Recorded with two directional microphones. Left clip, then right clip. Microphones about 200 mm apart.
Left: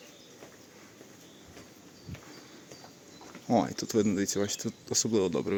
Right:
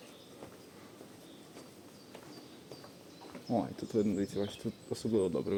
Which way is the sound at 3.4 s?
25° left (ahead or behind).